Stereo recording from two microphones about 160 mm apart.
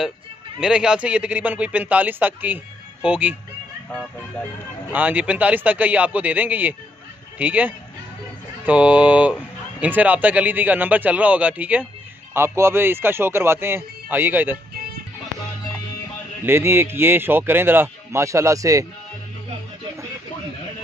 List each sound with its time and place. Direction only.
0.6 s speech: 5° right (ahead or behind)
4.9 s speech: 10° right (ahead or behind)
16.4 s speech: 15° right (ahead or behind)